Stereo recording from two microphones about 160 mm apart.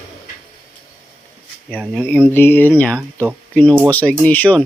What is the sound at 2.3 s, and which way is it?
A man's voice, 15° left (ahead or behind).